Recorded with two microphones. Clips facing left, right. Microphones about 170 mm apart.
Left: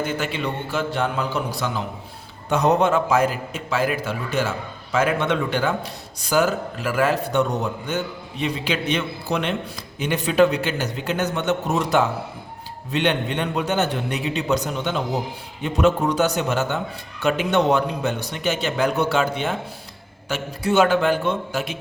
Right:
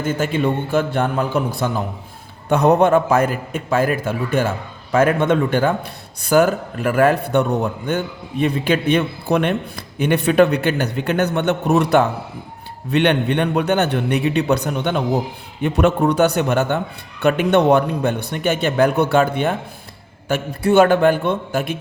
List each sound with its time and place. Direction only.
0.0 s a man's voice: 45° right (ahead or behind)